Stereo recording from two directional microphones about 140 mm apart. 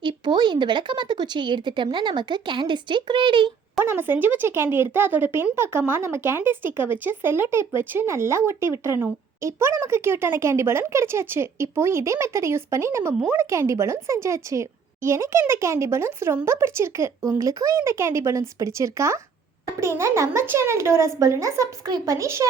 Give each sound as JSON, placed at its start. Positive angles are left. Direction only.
{"t": 0.0, "sound": "speech", "side_deg": -35}
{"t": 3.8, "sound": "a woman's voice", "side_deg": -15}